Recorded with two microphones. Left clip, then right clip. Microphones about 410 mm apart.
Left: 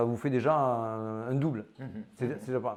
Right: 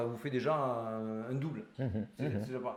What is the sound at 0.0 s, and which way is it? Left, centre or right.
A man's voice, left.